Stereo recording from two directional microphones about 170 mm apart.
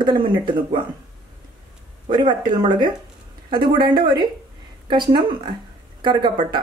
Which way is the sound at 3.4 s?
30° right (ahead or behind).